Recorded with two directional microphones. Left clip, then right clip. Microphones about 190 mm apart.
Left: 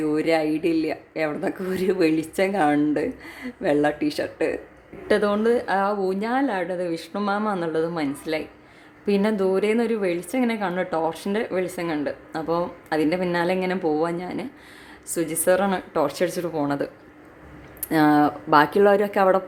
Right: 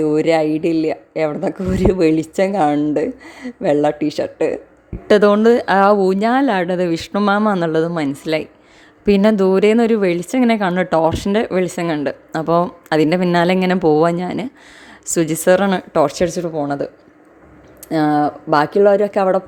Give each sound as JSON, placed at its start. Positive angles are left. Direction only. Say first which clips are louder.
{"t": 0.0, "sound": "a woman's voice", "louder": "right 7 dB", "side_deg": -30}